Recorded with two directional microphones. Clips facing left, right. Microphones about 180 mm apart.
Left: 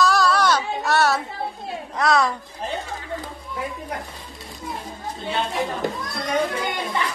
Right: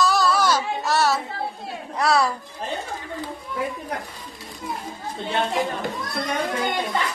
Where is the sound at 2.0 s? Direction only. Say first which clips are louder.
Left 1 dB; 35° right (ahead or behind).